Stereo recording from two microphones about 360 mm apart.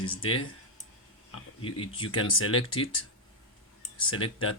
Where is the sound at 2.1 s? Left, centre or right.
Left.